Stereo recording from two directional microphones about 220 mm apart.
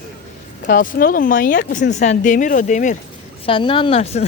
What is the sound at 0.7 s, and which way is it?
Speech, 40° left (ahead or behind).